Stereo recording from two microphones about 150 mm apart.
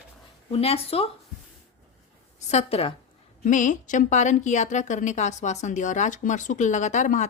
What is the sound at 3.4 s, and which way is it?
Speech, 60° left (ahead or behind).